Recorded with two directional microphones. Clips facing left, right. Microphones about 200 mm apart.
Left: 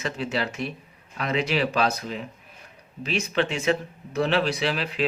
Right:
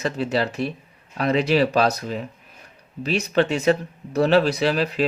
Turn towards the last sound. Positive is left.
turn(degrees=-40)  # may be behind; listen again after turning